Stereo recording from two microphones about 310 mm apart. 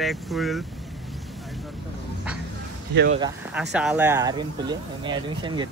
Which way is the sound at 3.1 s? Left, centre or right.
Centre.